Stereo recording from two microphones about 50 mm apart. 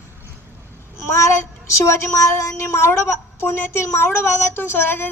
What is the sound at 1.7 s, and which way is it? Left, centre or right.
A woman's voice, left.